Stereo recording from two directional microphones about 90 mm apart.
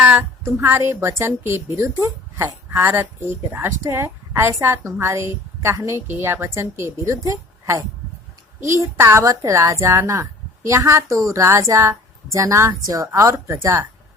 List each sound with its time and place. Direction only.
0.2 s a woman's voice: 30° right (ahead or behind)